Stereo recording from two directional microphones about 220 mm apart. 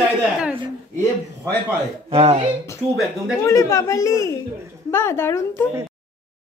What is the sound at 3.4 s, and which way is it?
Speech, 15° left (ahead or behind).